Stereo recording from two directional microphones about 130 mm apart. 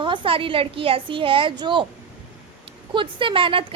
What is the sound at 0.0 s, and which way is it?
A woman's voice, 40° right (ahead or behind).